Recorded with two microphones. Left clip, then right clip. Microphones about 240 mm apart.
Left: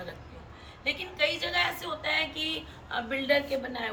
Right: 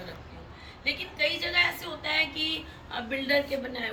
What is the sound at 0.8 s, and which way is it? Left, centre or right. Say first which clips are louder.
A woman's voice: even; centre.